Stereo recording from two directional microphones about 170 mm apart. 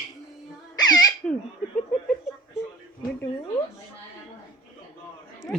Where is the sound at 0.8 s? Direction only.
25° left (ahead or behind).